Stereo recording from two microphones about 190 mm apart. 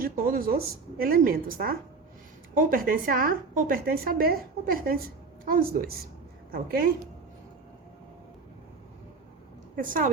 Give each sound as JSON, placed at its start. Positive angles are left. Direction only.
{"t": 0.0, "sound": "a woman's voice", "side_deg": -50}
{"t": 9.7, "sound": "a woman's voice", "side_deg": -45}